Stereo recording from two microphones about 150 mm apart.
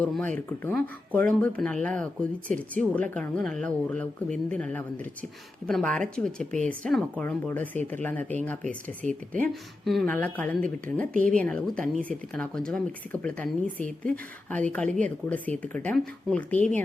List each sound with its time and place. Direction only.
0.0 s a woman's voice: 10° left (ahead or behind)
8.6 s speech: 55° right (ahead or behind)
9.8 s a woman's voice: centre (ahead or behind)